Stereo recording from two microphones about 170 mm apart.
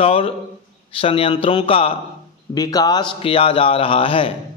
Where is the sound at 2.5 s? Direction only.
20° left (ahead or behind).